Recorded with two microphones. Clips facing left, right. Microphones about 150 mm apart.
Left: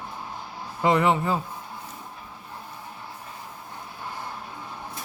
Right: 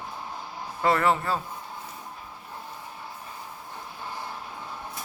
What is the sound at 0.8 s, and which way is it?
Speech, 15° left (ahead or behind).